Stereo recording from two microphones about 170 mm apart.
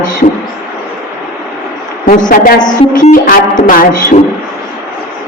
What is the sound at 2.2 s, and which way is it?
Speech, 55° left (ahead or behind).